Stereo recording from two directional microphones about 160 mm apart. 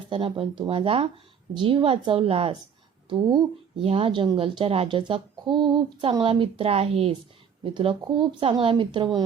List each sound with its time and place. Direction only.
0.1 s a woman's voice: 35° right (ahead or behind)